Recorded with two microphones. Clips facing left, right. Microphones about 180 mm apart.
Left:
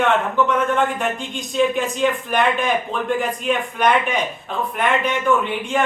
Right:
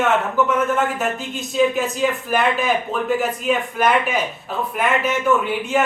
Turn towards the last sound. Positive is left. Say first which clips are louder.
# right 1 dB
turn(degrees=-5)  # may be behind; listen again after turning